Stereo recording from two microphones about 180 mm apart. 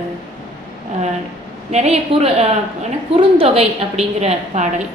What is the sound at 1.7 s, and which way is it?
A woman's voice, 35° right (ahead or behind).